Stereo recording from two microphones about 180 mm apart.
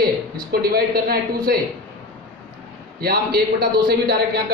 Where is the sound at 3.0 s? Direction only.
60° right (ahead or behind).